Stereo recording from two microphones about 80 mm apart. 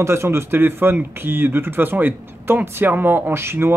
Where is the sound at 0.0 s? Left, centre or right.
Right.